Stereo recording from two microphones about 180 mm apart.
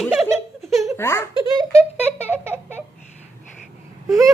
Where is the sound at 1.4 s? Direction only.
20° right (ahead or behind).